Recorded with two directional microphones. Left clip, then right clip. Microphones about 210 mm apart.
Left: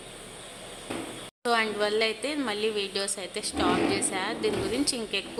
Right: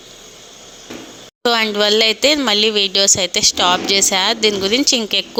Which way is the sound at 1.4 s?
40° right (ahead or behind).